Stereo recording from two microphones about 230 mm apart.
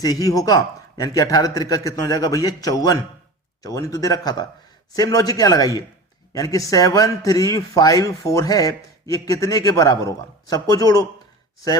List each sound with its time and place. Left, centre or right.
0.0 s a man's voice: centre